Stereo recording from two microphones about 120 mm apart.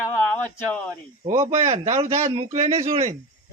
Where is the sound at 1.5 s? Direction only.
60° right (ahead or behind).